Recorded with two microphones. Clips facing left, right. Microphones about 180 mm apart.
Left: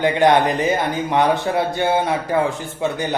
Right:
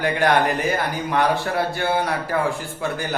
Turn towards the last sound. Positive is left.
turn(degrees=20)  # may be behind; listen again after turning